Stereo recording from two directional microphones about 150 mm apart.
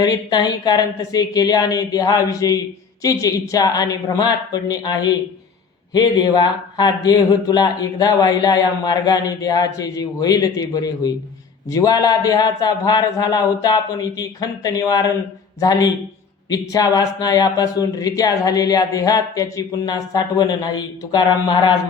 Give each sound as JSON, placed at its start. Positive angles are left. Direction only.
{"t": 0.0, "sound": "speech", "side_deg": 25}